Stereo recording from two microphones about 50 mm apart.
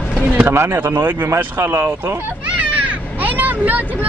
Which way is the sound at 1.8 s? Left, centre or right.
Right.